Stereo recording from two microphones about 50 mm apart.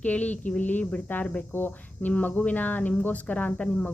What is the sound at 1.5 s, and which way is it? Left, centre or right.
A woman's voice, left.